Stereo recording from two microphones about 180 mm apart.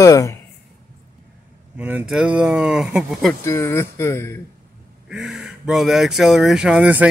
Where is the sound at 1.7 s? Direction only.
10° right (ahead or behind).